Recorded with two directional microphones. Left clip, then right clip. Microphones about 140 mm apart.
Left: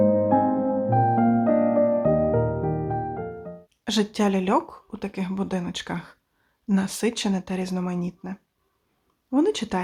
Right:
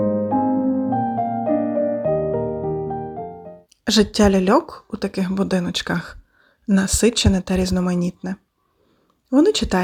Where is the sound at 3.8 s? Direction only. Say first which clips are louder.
Right 8 dB; 35° right (ahead or behind).